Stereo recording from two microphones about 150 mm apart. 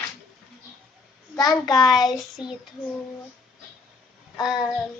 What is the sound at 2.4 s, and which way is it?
Speech, 5° right (ahead or behind).